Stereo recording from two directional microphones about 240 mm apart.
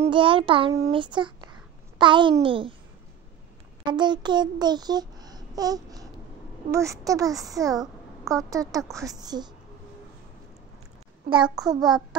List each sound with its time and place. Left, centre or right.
0.0 s a child's voice: right
3.8 s a child's voice: centre
11.4 s a child's voice: centre
11.7 s a child's voice: centre